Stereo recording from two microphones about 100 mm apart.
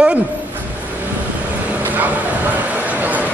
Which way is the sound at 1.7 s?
15° right (ahead or behind).